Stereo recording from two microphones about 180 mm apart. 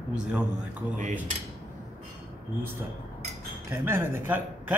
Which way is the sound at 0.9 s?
45° right (ahead or behind).